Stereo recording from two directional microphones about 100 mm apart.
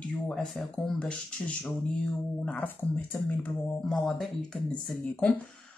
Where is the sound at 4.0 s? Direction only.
Centre (ahead or behind).